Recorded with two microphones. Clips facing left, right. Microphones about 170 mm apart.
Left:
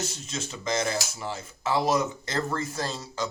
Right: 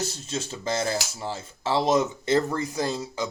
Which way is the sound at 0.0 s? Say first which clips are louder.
Right 3 dB; 35° right (ahead or behind).